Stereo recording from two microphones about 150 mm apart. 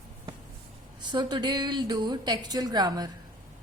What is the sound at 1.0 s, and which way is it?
A woman's voice, 30° right (ahead or behind).